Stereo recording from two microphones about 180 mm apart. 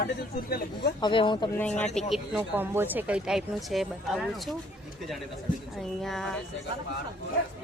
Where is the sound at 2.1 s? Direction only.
5° right (ahead or behind).